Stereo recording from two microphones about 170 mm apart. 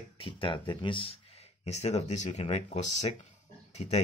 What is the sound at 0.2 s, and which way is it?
Speech, 30° left (ahead or behind).